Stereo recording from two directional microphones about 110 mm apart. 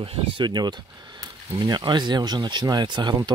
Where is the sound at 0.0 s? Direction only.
60° right (ahead or behind).